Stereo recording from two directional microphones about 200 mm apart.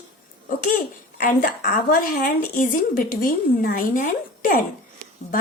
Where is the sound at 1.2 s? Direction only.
40° left (ahead or behind).